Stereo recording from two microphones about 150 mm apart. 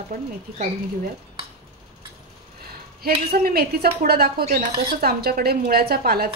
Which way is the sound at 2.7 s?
85° right.